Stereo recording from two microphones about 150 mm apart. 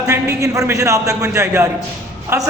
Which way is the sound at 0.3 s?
20° right (ahead or behind).